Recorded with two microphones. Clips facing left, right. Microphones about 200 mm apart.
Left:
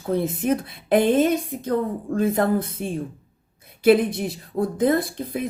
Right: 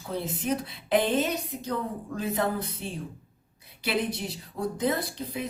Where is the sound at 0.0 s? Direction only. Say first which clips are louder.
Left 9 dB; 55° left (ahead or behind).